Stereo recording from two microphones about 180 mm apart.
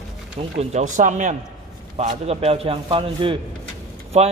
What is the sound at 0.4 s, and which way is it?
A man's voice, 35° right (ahead or behind).